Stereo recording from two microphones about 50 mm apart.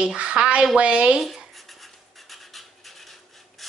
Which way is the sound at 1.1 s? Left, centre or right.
Centre.